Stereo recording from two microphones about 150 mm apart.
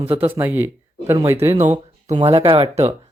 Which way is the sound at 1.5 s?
50° right (ahead or behind).